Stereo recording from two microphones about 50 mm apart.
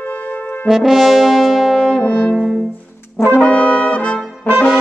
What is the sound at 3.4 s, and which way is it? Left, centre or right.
Brass instrument, left.